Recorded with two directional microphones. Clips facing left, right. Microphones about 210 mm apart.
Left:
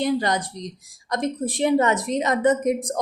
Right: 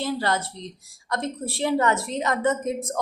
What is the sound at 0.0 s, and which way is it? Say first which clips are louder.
A woman's voice: left 3 dB; 15° left (ahead or behind).